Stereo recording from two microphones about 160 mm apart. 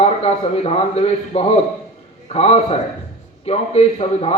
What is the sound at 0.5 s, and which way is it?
A man's voice, 40° left (ahead or behind).